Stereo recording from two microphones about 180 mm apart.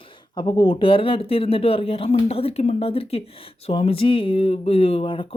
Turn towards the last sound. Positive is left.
turn(degrees=30)  # may be behind; listen again after turning